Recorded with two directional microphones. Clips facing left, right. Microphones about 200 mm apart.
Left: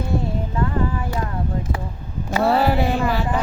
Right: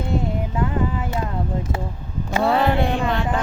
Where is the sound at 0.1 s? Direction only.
20° right (ahead or behind).